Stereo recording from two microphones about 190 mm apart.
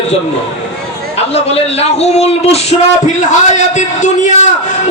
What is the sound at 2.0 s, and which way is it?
Speech, 35° left (ahead or behind).